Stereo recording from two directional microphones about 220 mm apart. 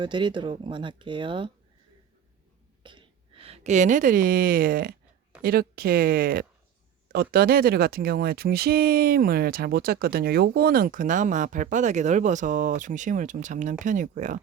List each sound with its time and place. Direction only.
0.0 s speech: 20° right (ahead or behind)
2.8 s speech: 20° right (ahead or behind)